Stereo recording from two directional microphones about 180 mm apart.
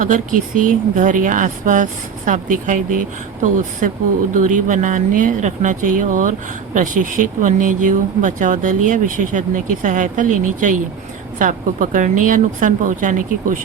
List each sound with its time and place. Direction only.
0.0 s speech: 50° right (ahead or behind)